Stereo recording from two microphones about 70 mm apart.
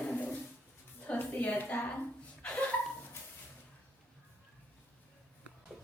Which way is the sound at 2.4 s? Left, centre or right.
Centre.